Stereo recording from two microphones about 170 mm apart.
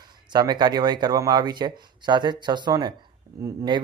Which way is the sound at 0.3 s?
25° right (ahead or behind).